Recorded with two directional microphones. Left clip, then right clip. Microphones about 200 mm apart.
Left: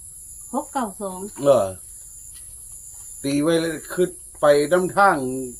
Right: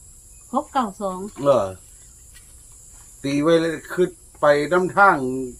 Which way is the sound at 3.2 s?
5° right (ahead or behind).